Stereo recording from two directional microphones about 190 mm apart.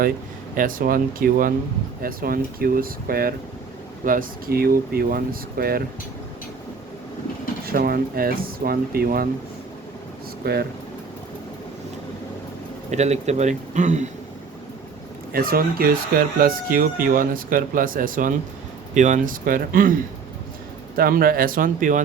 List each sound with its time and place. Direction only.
0.5 s speech: 45° right (ahead or behind)
7.6 s speech: 50° right (ahead or behind)
10.4 s speech: 55° right (ahead or behind)
12.9 s speech: 35° right (ahead or behind)
15.3 s speech: 50° right (ahead or behind)
20.9 s speech: 50° right (ahead or behind)